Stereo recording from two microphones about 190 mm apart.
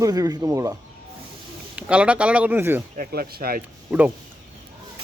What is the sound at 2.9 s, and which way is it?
Speech, 50° right (ahead or behind).